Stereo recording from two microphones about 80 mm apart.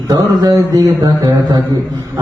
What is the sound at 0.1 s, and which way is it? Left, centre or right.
A man's voice, right.